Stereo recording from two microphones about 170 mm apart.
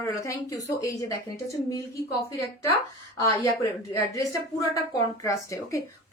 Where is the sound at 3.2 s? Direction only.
15° left (ahead or behind).